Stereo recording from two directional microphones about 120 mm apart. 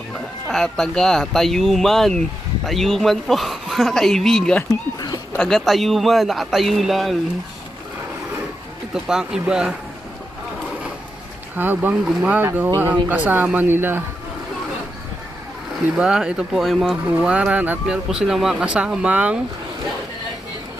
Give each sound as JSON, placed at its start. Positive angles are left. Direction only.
{"t": 0.4, "sound": "speech", "side_deg": 5}
{"t": 4.7, "sound": "a sound", "side_deg": 30}
{"t": 5.4, "sound": "speech", "side_deg": 5}
{"t": 8.9, "sound": "speech", "side_deg": -5}
{"t": 11.5, "sound": "speech", "side_deg": -15}
{"t": 16.0, "sound": "speech", "side_deg": -5}